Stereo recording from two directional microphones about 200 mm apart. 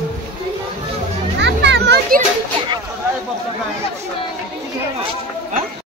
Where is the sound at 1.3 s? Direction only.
60° right (ahead or behind).